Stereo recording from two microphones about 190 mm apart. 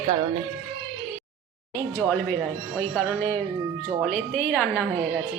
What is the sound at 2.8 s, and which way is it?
Speech, 10° left (ahead or behind).